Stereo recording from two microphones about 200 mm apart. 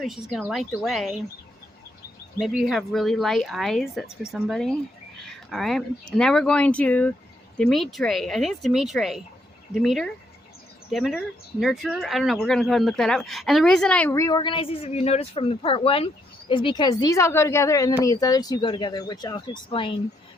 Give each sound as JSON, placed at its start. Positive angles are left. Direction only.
{"t": 0.0, "sound": "speech", "side_deg": 0}
{"t": 2.4, "sound": "a woman's voice", "side_deg": 0}